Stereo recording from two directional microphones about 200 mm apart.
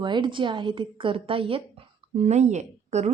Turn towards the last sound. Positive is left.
turn(degrees=-35)  # may be behind; listen again after turning